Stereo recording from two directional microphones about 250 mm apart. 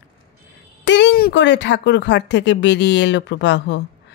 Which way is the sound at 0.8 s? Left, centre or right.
Left.